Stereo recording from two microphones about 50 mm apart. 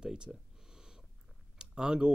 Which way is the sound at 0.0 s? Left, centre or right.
Centre.